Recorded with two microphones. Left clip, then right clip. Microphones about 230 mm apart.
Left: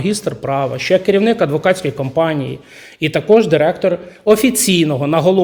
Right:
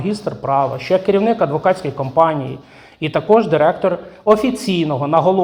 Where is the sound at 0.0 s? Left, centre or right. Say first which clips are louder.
Left 2 dB; left.